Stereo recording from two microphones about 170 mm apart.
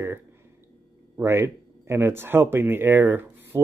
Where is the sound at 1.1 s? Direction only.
15° right (ahead or behind).